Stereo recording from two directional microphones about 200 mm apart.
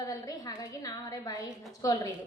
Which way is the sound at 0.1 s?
20° left (ahead or behind).